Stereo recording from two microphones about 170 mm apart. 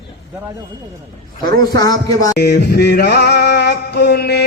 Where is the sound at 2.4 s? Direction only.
75° left (ahead or behind).